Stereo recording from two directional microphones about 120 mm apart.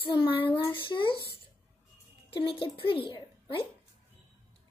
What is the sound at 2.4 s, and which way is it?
A child's voice, 45° left (ahead or behind).